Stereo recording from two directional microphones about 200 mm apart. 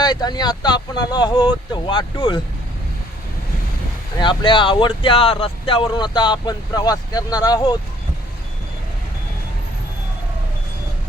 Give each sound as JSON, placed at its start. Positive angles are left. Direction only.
{"t": 0.0, "sound": "speech", "side_deg": 20}
{"t": 4.2, "sound": "speech", "side_deg": 25}